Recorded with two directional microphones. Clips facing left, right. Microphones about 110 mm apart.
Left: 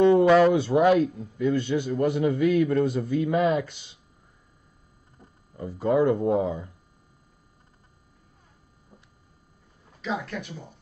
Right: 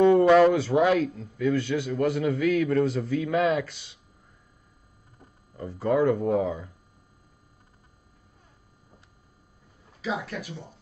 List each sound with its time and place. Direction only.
0.4 s a man's voice: 20° left (ahead or behind)
5.6 s speech: 15° left (ahead or behind)
10.0 s speech: 5° right (ahead or behind)